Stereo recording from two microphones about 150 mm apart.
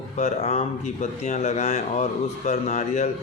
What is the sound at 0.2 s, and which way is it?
A man's voice, 50° left (ahead or behind).